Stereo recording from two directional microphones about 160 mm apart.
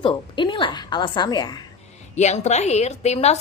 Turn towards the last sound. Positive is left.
turn(degrees=45)  # may be behind; listen again after turning